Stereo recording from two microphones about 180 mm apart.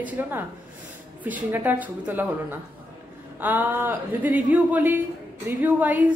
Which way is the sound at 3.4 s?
10° right (ahead or behind).